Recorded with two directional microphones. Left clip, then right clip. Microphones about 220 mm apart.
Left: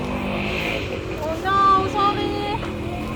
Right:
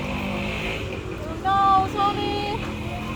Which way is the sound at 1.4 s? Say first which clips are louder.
Left 1 dB; 30° right (ahead or behind).